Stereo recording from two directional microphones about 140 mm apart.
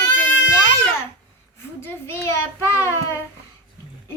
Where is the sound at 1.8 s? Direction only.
15° left (ahead or behind).